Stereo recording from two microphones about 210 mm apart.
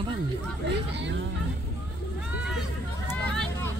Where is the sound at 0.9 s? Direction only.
55° right (ahead or behind).